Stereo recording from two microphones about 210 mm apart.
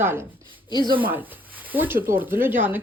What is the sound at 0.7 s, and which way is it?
Speech, 20° left (ahead or behind).